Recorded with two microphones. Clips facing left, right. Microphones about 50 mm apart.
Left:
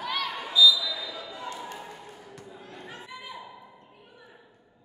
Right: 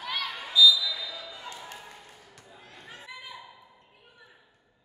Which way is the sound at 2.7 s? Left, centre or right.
Centre.